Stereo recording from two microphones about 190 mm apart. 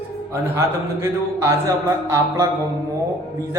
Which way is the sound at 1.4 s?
15° right (ahead or behind).